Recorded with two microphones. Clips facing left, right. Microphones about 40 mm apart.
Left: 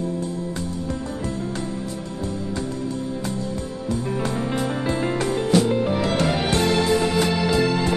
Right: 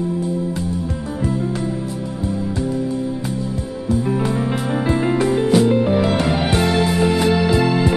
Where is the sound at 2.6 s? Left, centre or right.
Centre.